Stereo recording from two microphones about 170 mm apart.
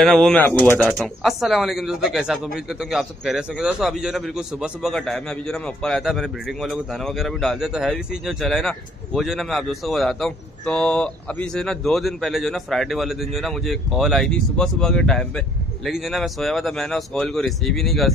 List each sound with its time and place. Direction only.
0.0 s speech: 5° left (ahead or behind)
0.8 s speech: centre (ahead or behind)